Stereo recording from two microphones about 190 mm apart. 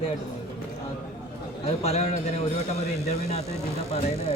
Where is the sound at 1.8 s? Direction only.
35° left (ahead or behind).